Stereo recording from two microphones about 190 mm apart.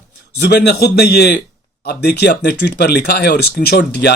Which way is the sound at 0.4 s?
60° left (ahead or behind).